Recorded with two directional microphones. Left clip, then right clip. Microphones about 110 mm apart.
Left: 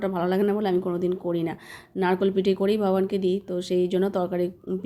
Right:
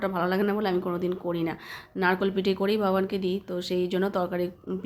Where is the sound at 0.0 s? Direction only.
20° left (ahead or behind).